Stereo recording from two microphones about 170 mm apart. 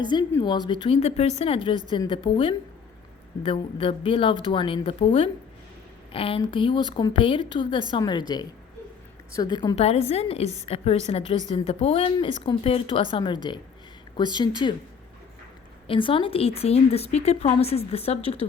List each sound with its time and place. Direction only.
0.1 s a woman's voice: 25° left (ahead or behind)
9.3 s a woman's voice: 25° left (ahead or behind)
9.7 s a woman's voice: 35° left (ahead or behind)
15.9 s a woman's voice: 30° left (ahead or behind)